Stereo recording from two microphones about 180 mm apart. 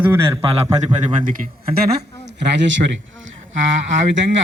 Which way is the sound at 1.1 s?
45° right (ahead or behind).